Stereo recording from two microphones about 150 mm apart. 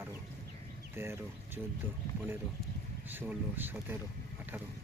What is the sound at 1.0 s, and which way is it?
Speech, 15° right (ahead or behind).